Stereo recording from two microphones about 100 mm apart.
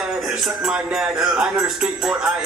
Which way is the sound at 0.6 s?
5° right (ahead or behind).